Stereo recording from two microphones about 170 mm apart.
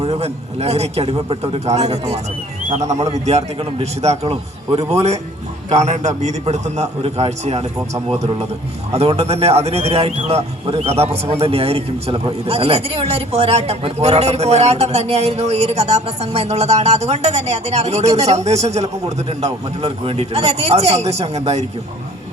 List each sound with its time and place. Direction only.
0.0 s a man's voice: 35° right (ahead or behind)
8.9 s a man's voice: 35° right (ahead or behind)